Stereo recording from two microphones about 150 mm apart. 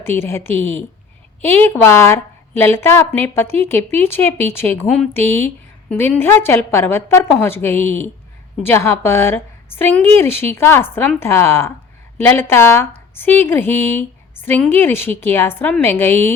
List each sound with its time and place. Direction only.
0.0 s speech: 15° left (ahead or behind)